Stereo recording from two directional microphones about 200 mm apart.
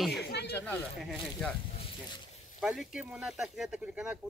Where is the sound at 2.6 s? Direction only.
5° right (ahead or behind).